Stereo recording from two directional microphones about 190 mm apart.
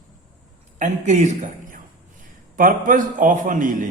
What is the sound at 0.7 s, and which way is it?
A woman's voice, 40° right (ahead or behind).